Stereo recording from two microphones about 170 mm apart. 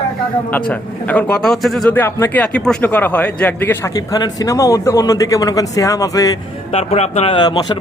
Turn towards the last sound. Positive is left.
turn(degrees=25)  # may be behind; listen again after turning